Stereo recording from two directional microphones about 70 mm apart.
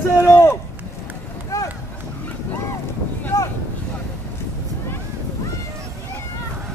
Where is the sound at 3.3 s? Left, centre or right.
Left.